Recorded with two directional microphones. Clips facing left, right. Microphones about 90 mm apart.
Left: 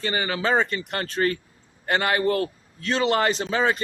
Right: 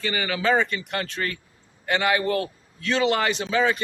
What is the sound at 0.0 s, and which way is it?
A man's voice, 35° left (ahead or behind).